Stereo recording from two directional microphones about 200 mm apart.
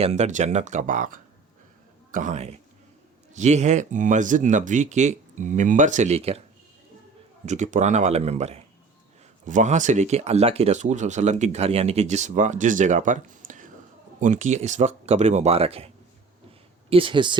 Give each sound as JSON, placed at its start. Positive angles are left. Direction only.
{"t": 0.0, "sound": "speech", "side_deg": -35}
{"t": 7.4, "sound": "speech", "side_deg": -35}
{"t": 16.9, "sound": "speech", "side_deg": -25}